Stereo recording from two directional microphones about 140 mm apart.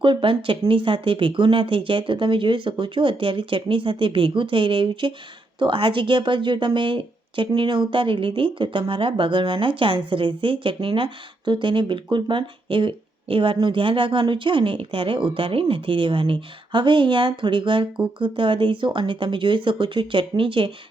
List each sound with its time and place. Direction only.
0.0 s speech: 40° right (ahead or behind)